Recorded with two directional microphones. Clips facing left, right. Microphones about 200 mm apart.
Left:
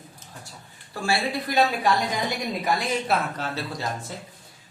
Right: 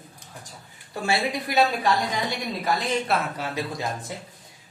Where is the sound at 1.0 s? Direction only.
20° right (ahead or behind).